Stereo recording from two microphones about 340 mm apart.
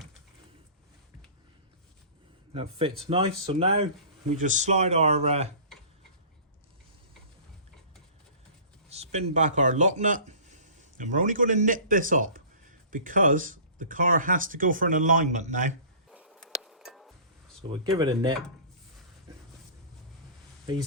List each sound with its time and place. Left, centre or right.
2.5 s speech: centre
8.9 s speech: centre
16.0 s a sound: centre
17.7 s speech: centre